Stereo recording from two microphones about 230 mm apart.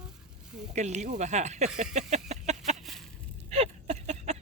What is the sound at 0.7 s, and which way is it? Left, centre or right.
Speech, right.